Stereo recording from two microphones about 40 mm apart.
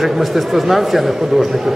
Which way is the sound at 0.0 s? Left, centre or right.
Centre.